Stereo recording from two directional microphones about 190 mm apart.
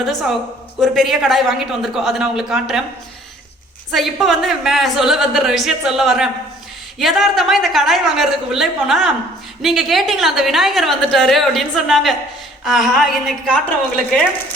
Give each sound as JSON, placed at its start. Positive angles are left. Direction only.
{"t": 0.0, "sound": "a woman's voice", "side_deg": 0}
{"t": 3.9, "sound": "a woman's voice", "side_deg": 0}